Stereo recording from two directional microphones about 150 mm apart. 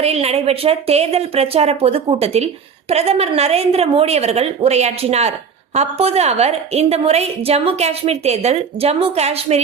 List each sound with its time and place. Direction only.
0.0 s a woman's voice: 45° right (ahead or behind)